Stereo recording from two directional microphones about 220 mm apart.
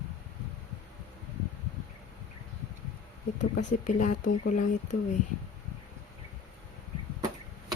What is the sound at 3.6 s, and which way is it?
Speech, 35° left (ahead or behind).